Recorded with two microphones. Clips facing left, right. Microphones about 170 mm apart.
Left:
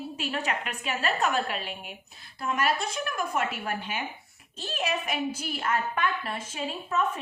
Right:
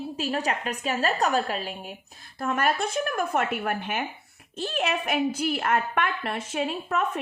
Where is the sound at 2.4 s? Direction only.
50° right (ahead or behind).